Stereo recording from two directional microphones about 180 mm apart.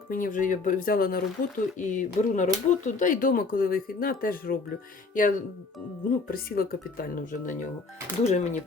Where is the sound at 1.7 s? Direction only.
45° left (ahead or behind).